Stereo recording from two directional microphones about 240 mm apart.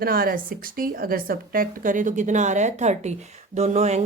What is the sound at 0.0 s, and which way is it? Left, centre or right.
A woman's voice, right.